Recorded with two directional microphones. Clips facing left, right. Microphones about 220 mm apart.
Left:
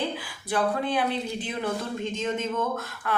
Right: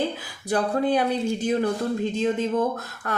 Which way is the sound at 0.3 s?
40° right (ahead or behind).